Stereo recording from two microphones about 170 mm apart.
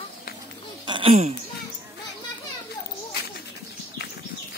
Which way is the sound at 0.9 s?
35° right (ahead or behind).